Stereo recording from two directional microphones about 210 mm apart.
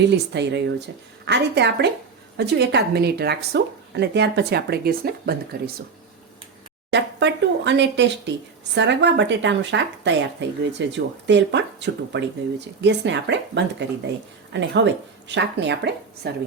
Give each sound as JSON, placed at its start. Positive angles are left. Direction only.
{"t": 0.0, "sound": "speech", "side_deg": -55}
{"t": 6.9, "sound": "a sound", "side_deg": -55}
{"t": 8.7, "sound": "speech", "side_deg": -55}